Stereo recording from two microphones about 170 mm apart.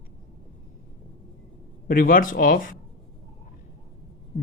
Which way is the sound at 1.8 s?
55° left (ahead or behind).